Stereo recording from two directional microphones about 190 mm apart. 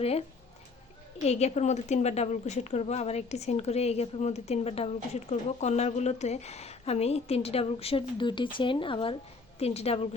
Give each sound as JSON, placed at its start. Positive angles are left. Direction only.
{"t": 0.0, "sound": "speech", "side_deg": 35}